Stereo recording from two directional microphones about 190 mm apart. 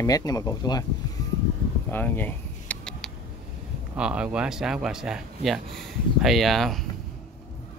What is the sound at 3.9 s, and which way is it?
Speech, 5° right (ahead or behind).